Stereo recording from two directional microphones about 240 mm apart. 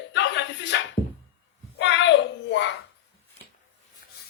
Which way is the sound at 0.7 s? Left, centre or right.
Left.